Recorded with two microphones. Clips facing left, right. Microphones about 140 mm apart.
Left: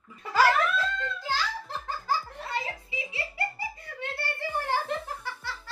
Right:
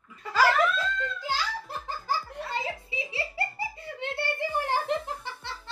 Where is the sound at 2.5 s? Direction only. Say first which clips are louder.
Even; 25° right (ahead or behind).